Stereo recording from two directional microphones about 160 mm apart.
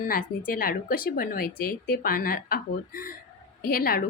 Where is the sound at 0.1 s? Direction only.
60° left (ahead or behind).